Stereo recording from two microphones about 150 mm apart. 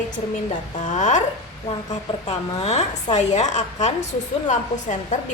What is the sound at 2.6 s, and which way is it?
A woman's voice, 45° left (ahead or behind).